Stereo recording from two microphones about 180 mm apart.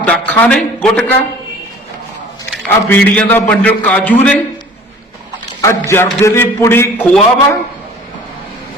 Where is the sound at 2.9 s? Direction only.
10° left (ahead or behind).